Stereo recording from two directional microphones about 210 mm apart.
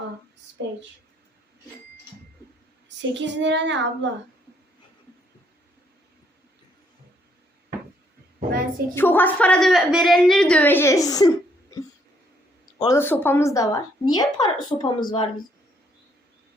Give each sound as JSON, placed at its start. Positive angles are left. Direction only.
{"t": 3.2, "sound": "child singing", "side_deg": -60}
{"t": 9.0, "sound": "a woman's voice", "side_deg": 10}
{"t": 12.8, "sound": "speech", "side_deg": 15}